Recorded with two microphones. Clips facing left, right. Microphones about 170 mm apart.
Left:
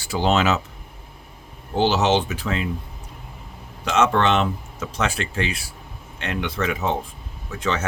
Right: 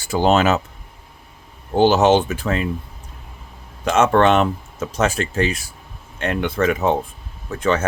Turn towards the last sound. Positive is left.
turn(degrees=-50)  # may be behind; listen again after turning